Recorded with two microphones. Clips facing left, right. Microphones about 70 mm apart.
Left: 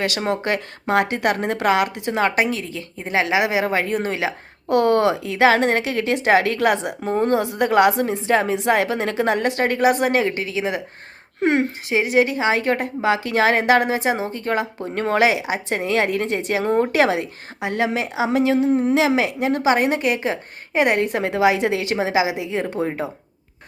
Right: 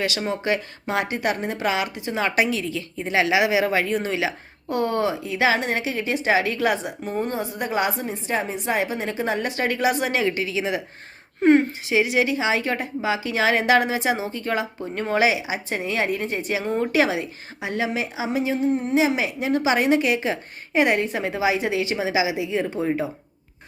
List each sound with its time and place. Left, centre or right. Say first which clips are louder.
0.0 s a woman's voice: left 3 dB; left
4.7 s a woman's voice: left 6 dB; left
11.4 s speech: right 3 dB; left
11.9 s a woman's voice: left 3 dB; left
14.9 s a woman's voice: left 3 dB; left